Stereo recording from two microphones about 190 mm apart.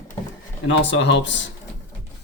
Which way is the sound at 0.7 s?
75° left (ahead or behind).